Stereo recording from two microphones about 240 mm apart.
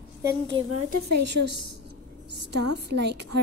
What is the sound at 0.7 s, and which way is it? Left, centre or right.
A woman's voice, right.